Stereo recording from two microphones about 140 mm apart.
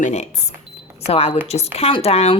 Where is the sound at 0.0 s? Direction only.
55° left (ahead or behind).